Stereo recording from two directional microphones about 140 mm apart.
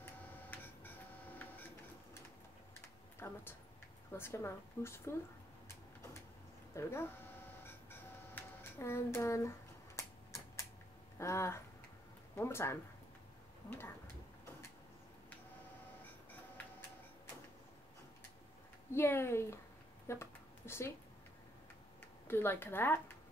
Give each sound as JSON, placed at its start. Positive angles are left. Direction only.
{"t": 0.0, "sound": "printer", "side_deg": 10}
{"t": 2.7, "sound": "typing", "side_deg": 15}
{"t": 4.1, "sound": "a woman's voice", "side_deg": 20}
{"t": 6.7, "sound": "a sound", "side_deg": 20}
{"t": 8.4, "sound": "speech", "side_deg": 15}
{"t": 9.9, "sound": "a sound", "side_deg": 20}
{"t": 16.6, "sound": "tick-tock", "side_deg": 10}
{"t": 18.9, "sound": "a woman's voice", "side_deg": 15}
{"t": 20.1, "sound": "a sound", "side_deg": 20}
{"t": 22.3, "sound": "a woman's voice", "side_deg": 15}